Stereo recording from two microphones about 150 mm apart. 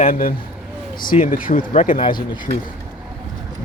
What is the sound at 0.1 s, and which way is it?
Speech, 65° left (ahead or behind).